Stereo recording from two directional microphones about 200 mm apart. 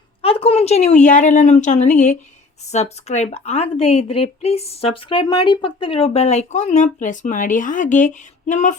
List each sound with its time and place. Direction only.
0.2 s a woman's voice: 30° left (ahead or behind)